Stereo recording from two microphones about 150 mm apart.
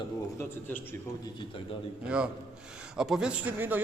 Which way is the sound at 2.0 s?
5° right (ahead or behind).